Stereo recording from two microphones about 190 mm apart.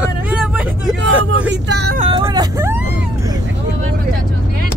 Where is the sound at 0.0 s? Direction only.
5° right (ahead or behind).